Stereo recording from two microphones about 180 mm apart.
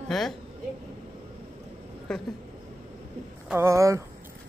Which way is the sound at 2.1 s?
5° left (ahead or behind).